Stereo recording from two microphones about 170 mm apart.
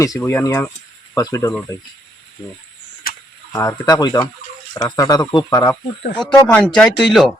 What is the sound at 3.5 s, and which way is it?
Speech, 20° left (ahead or behind).